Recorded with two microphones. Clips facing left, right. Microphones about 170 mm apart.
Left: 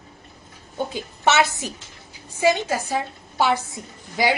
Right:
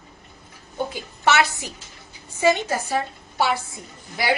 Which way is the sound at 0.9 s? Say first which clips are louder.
Left 1 dB; 20° left (ahead or behind).